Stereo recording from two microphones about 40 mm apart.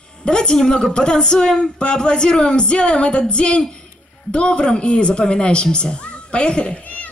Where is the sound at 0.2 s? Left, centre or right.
Left.